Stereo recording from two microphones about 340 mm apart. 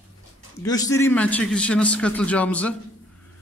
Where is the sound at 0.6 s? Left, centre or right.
Centre.